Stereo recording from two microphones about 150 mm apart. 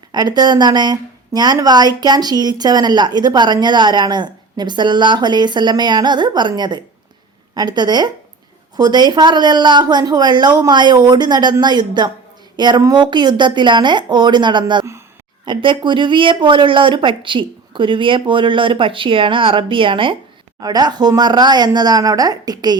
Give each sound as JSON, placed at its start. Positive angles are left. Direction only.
{"t": 0.1, "sound": "speech", "side_deg": -25}